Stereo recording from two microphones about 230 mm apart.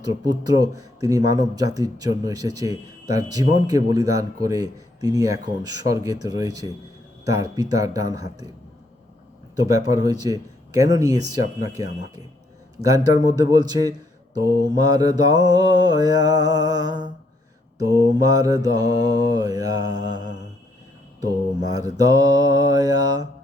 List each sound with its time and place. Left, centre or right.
0.0 s speech: centre
9.6 s speech: centre
13.1 s speech: centre
21.7 s speech: centre